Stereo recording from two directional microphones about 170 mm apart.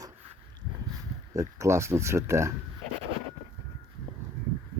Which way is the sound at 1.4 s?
15° right (ahead or behind).